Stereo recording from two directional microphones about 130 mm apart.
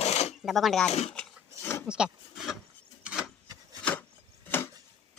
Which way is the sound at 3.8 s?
10° left (ahead or behind).